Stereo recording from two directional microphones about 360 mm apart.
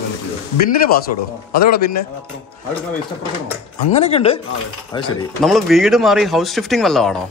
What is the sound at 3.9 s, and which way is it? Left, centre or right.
Speech, centre.